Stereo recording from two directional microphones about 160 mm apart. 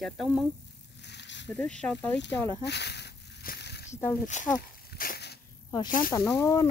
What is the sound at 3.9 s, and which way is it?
Speech, 15° left (ahead or behind).